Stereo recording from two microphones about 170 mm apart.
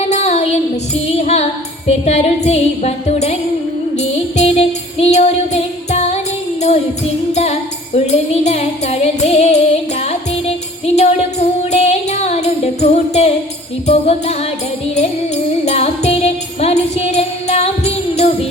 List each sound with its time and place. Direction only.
0.1 s music: 40° left (ahead or behind)
15.6 s music: 40° left (ahead or behind)